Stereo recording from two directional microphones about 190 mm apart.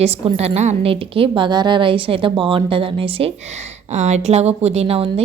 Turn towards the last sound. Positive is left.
turn(degrees=-30)  # may be behind; listen again after turning